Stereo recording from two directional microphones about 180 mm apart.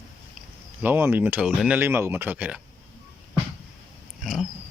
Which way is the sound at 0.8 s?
10° right (ahead or behind).